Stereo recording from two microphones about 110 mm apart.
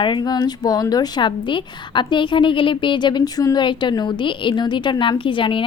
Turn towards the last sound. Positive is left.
turn(degrees=50)  # may be behind; listen again after turning